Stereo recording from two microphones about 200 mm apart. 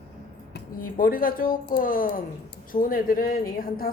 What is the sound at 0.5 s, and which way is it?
A woman's voice, 45° left (ahead or behind).